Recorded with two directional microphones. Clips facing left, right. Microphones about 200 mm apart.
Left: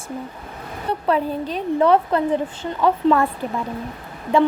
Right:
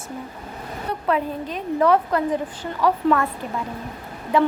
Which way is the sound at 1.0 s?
30° left (ahead or behind).